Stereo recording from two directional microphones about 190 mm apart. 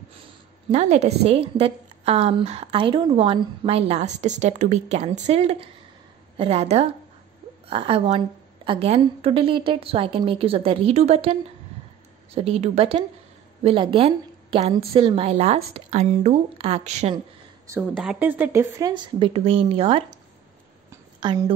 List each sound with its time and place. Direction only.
0.7 s a woman's voice: 35° right (ahead or behind)
12.4 s a woman's voice: 35° right (ahead or behind)
17.7 s a woman's voice: 15° right (ahead or behind)